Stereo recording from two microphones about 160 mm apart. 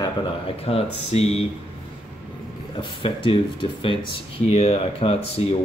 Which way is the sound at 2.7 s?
30° left (ahead or behind).